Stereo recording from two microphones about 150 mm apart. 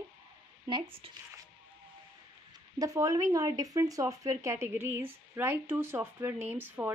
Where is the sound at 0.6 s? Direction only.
35° right (ahead or behind).